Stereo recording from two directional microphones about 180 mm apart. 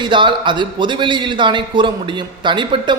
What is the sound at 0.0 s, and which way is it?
A man's voice, 25° right (ahead or behind).